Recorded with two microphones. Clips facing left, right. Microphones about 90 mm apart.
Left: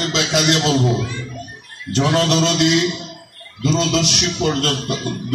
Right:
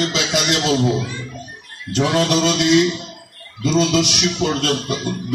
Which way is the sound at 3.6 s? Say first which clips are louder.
Right 1 dB; 5° right (ahead or behind).